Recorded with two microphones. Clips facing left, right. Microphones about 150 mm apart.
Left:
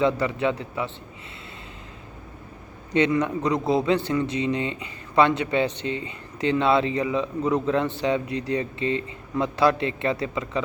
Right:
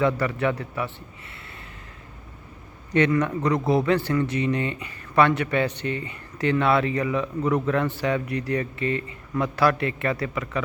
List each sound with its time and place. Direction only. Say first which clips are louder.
0.0 s speech: even; 20° left (ahead or behind)
2.9 s speech: even; 20° left (ahead or behind)